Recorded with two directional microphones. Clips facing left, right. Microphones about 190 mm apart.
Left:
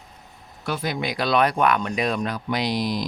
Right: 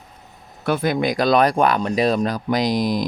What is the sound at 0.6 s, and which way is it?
Speech, 55° right (ahead or behind).